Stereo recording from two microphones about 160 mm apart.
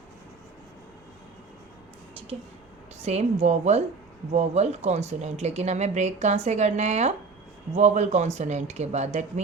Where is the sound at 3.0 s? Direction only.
45° right (ahead or behind).